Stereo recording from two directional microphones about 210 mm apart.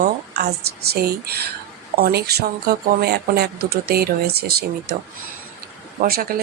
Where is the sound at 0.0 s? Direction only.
50° right (ahead or behind).